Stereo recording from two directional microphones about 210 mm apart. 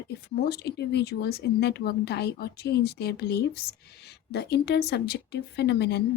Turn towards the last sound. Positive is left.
turn(degrees=50)  # may be behind; listen again after turning